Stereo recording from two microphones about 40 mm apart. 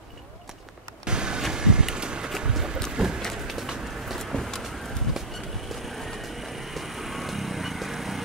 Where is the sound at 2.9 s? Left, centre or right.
Centre.